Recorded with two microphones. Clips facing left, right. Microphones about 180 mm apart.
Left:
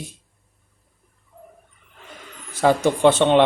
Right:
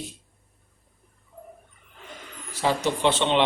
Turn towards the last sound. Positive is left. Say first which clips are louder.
# left 7 dB
turn(degrees=50)  # may be behind; listen again after turning